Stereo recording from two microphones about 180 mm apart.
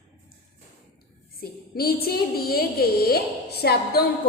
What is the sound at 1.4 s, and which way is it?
A woman's voice, 55° left (ahead or behind).